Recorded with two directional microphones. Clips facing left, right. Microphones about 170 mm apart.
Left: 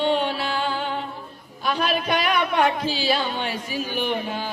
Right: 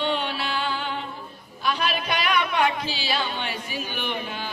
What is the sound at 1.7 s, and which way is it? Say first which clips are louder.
Music: left 3 dB; 45° left (ahead or behind).